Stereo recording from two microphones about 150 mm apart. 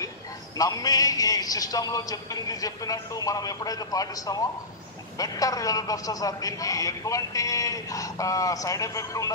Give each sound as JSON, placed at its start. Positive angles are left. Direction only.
{"t": 0.6, "sound": "a man's voice", "side_deg": 25}